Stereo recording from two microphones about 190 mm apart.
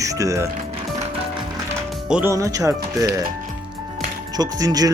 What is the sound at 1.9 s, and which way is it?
Speech, 5° right (ahead or behind).